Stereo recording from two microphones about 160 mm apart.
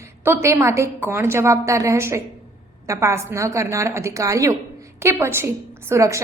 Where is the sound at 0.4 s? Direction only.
20° right (ahead or behind).